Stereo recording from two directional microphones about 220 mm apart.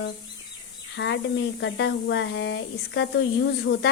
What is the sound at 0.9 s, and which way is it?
A woman's voice, 55° left (ahead or behind).